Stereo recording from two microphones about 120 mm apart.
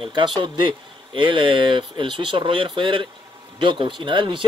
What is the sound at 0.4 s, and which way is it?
Speech, 45° right (ahead or behind).